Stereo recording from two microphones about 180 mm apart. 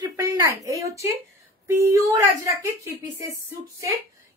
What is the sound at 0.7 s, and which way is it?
A woman's voice, 20° right (ahead or behind).